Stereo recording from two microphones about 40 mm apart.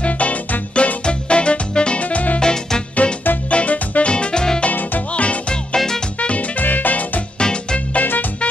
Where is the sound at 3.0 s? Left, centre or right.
Left.